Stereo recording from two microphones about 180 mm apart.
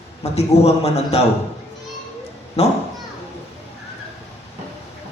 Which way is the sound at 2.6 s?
35° left (ahead or behind).